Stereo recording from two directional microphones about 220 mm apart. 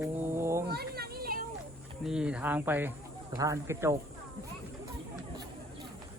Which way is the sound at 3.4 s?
15° right (ahead or behind).